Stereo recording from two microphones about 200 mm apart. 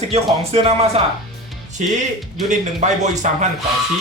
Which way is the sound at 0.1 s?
30° right (ahead or behind).